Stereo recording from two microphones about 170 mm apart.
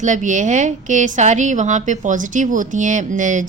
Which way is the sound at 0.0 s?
45° right (ahead or behind).